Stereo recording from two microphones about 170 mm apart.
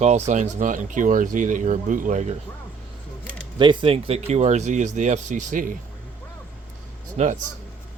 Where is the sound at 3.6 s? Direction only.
30° right (ahead or behind); by 5.7 s 50° right (ahead or behind).